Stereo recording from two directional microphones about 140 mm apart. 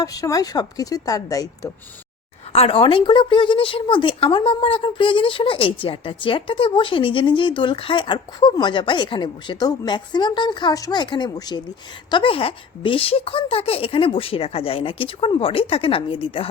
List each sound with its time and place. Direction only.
0.0 s a woman's voice: 25° left (ahead or behind)
2.5 s a woman's voice: 45° left (ahead or behind)